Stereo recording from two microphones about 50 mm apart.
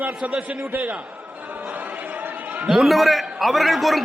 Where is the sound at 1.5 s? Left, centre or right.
Right.